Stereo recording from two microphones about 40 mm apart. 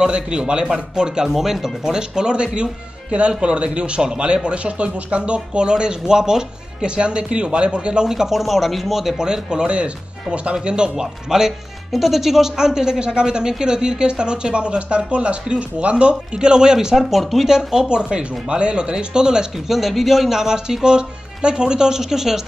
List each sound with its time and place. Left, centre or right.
0.0 s speech: right
8.1 s speech: centre
17.1 s speech: centre
17.5 s speech: centre
17.8 s speech: right
19.7 s speech: centre